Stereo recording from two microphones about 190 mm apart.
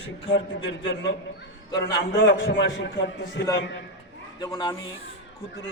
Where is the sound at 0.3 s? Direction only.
70° left (ahead or behind).